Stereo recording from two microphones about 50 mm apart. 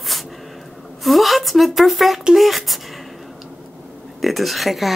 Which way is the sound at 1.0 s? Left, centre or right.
Centre.